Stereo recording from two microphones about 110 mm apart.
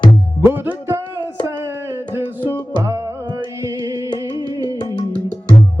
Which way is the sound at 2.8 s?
30° right (ahead or behind).